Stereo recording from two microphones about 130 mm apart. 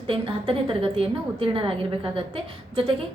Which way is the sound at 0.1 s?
45° right (ahead or behind).